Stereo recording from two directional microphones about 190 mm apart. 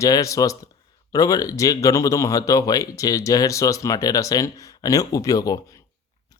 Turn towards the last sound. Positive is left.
turn(degrees=20)  # may be behind; listen again after turning